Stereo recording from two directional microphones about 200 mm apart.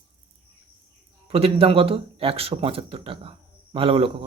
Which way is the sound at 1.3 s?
30° right (ahead or behind).